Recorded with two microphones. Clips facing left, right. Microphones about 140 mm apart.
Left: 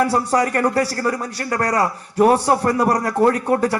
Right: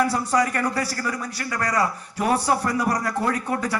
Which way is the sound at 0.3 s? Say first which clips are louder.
Left 4 dB; 45° left (ahead or behind).